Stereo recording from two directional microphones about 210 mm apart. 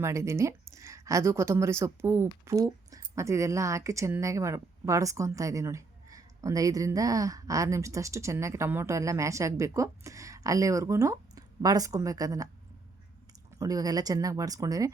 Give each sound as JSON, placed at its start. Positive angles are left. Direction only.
{"t": 0.0, "sound": "a woman's voice", "side_deg": -15}
{"t": 13.6, "sound": "speech", "side_deg": -15}